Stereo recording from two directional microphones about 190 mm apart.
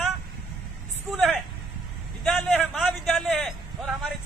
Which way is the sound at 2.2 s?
Centre (ahead or behind).